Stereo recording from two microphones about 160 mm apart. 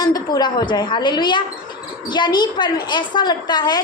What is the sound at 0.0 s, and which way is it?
A woman's voice, 25° left (ahead or behind).